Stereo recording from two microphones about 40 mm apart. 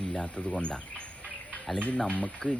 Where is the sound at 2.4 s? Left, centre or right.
Centre.